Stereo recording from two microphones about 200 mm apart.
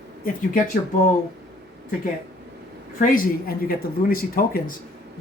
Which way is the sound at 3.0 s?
45° left (ahead or behind).